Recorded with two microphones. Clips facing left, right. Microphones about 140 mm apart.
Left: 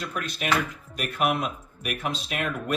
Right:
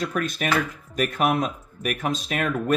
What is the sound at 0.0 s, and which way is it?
Speech, 50° right (ahead or behind).